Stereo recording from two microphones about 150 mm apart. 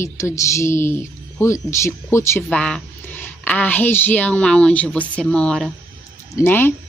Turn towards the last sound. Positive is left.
turn(degrees=15)  # may be behind; listen again after turning